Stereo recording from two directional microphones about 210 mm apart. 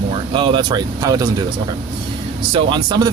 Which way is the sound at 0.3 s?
25° right (ahead or behind).